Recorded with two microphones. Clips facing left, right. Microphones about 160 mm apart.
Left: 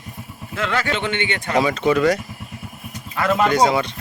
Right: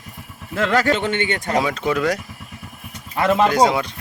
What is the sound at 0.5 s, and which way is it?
A man's voice, 40° right (ahead or behind).